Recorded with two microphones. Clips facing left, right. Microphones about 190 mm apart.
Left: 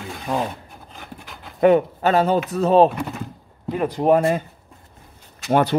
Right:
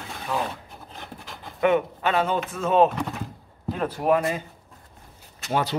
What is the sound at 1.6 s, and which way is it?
Speech, 40° left (ahead or behind).